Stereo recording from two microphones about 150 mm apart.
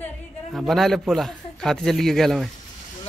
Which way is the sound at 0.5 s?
Centre (ahead or behind).